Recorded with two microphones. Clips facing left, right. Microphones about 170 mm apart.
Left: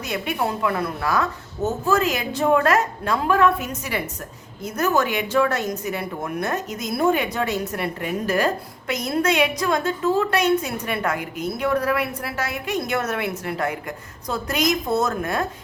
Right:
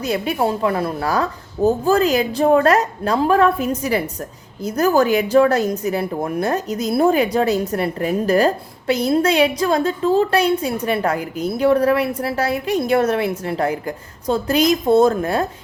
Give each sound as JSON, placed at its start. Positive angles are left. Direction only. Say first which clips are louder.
{"t": 0.0, "sound": "speech", "louder": "right 5 dB", "side_deg": -30}